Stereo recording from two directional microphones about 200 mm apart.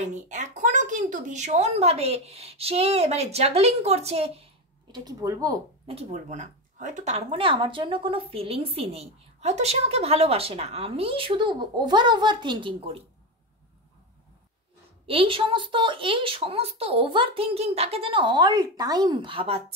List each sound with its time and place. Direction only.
0.0 s speech: 35° right (ahead or behind)
4.9 s speech: 20° right (ahead or behind)
5.9 s speech: 35° right (ahead or behind)
15.0 s speech: 25° right (ahead or behind)